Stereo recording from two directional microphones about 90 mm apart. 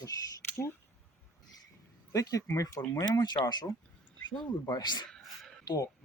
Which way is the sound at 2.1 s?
40° left (ahead or behind).